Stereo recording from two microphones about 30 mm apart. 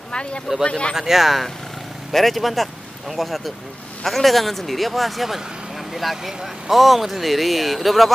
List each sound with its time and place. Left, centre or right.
0.1 s speech: left
0.9 s speech: centre